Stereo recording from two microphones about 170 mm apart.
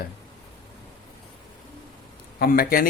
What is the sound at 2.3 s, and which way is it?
Speech, 65° left (ahead or behind).